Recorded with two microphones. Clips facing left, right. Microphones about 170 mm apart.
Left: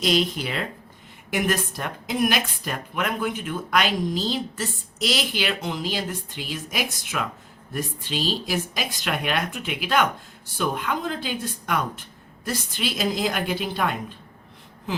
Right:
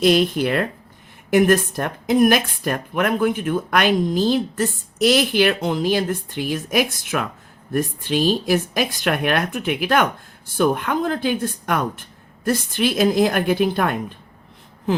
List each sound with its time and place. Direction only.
0.0 s a woman's voice: 55° right (ahead or behind)